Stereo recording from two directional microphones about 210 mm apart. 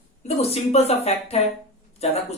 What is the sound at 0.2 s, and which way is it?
A woman's voice, 30° left (ahead or behind).